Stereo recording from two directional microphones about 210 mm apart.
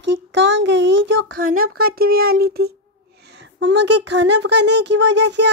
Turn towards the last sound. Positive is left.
turn(degrees=-55)  # may be behind; listen again after turning